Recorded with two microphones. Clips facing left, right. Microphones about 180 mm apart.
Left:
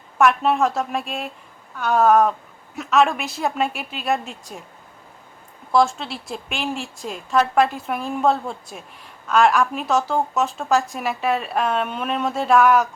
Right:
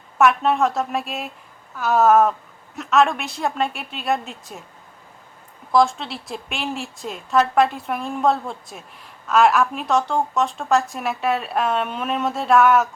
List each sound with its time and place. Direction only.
0.2 s speech: centre (ahead or behind)
5.7 s speech: centre (ahead or behind)